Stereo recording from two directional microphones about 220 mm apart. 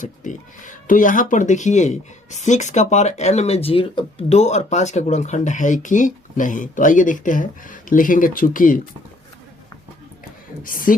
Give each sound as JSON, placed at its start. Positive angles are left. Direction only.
{"t": 0.0, "sound": "speech", "side_deg": 35}
{"t": 10.6, "sound": "speech", "side_deg": 40}